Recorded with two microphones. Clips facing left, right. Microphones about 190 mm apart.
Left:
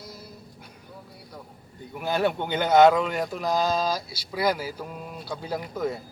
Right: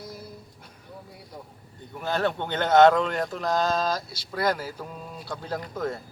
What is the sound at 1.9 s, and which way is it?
A man's voice, 10° left (ahead or behind).